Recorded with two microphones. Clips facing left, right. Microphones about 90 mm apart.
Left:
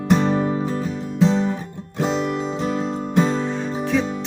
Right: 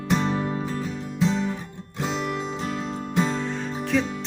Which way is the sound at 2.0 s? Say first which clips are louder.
Left 6 dB; 40° left (ahead or behind).